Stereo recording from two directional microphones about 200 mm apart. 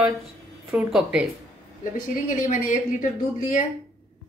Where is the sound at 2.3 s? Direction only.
40° left (ahead or behind).